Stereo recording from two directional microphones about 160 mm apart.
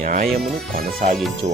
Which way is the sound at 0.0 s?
55° right (ahead or behind).